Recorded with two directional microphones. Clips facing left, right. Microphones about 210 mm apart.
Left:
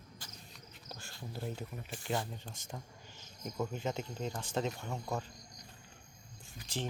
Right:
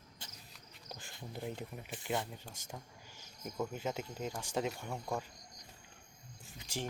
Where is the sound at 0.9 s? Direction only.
15° right (ahead or behind).